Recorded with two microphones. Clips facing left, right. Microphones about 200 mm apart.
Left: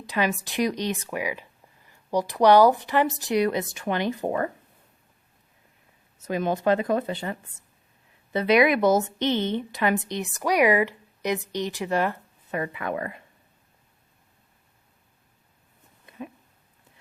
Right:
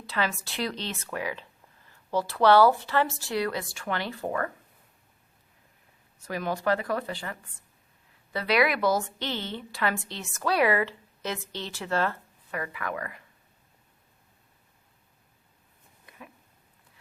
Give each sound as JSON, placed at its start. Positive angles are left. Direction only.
{"t": 0.0, "sound": "speech", "side_deg": 15}
{"t": 6.1, "sound": "a woman's voice", "side_deg": 20}
{"t": 16.0, "sound": "a sound", "side_deg": 25}